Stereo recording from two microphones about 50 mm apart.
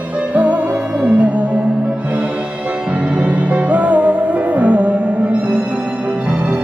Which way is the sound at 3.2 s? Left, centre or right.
Right.